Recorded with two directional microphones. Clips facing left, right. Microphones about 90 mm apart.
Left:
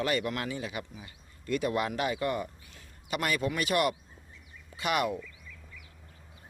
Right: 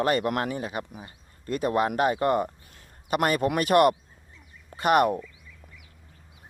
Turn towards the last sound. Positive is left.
turn(degrees=-15)  # may be behind; listen again after turning